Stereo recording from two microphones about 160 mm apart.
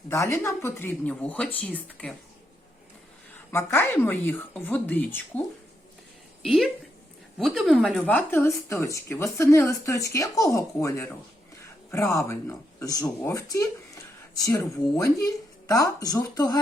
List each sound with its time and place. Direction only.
0.1 s speech: 20° left (ahead or behind)
3.5 s speech: 15° left (ahead or behind)
6.4 s speech: centre (ahead or behind); by 16.6 s 25° left (ahead or behind)